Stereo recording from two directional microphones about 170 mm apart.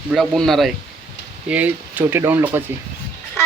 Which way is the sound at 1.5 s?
10° right (ahead or behind).